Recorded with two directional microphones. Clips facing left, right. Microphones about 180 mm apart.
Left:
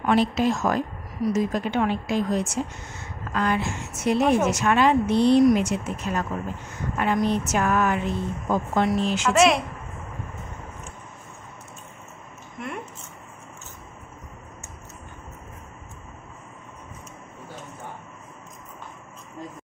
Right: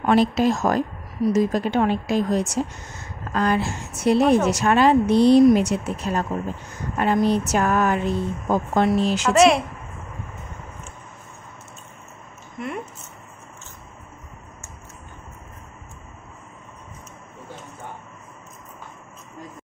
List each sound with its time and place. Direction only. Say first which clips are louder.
0.0 s a woman's voice: right 3 dB; 40° right (ahead or behind)
9.3 s a woman's voice: right 3 dB; centre (ahead or behind)